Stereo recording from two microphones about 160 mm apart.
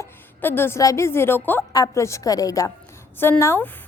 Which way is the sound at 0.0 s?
15° left (ahead or behind).